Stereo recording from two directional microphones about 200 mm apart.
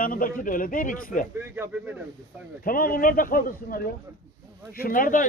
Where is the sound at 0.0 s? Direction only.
45° left (ahead or behind).